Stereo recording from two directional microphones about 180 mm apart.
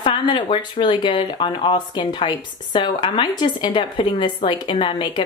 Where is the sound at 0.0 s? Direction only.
25° left (ahead or behind).